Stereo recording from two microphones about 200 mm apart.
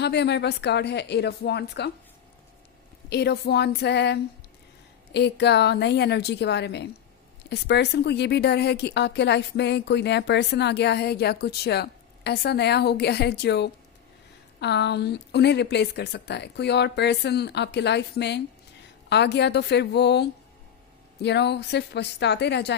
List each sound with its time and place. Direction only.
0.0 s a woman's voice: 55° left (ahead or behind)
3.1 s a woman's voice: 55° left (ahead or behind)